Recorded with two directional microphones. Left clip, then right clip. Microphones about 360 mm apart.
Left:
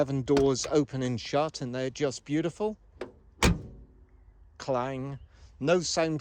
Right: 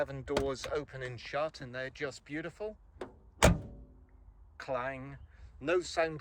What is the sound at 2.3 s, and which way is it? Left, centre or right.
Speech, left.